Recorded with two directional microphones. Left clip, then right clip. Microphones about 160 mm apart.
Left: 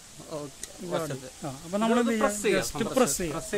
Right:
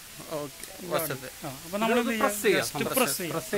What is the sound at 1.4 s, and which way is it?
Speech, 70° left (ahead or behind).